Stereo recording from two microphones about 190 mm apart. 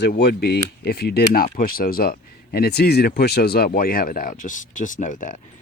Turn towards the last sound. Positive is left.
turn(degrees=40)  # may be behind; listen again after turning